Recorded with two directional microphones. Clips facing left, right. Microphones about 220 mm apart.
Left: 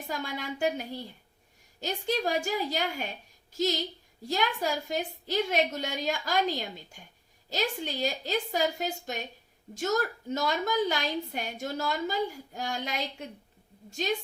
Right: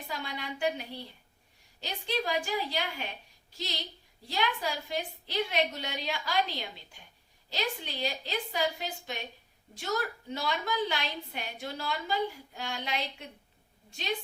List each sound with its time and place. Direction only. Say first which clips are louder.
0.1 s a woman's voice: left 4 dB; 45° left (ahead or behind)